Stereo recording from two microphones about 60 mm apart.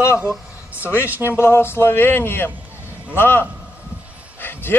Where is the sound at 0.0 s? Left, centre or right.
Left.